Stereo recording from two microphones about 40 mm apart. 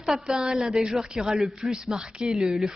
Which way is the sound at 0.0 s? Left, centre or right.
Centre.